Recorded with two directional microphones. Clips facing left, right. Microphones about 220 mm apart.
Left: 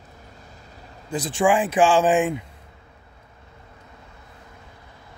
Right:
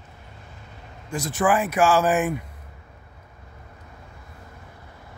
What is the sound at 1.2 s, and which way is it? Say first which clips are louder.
Speech: left 2 dB; 30° left (ahead or behind).